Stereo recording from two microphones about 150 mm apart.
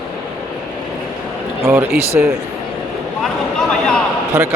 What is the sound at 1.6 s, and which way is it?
Speech, 15° right (ahead or behind).